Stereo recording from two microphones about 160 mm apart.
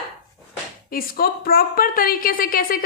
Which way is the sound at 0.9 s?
65° left (ahead or behind).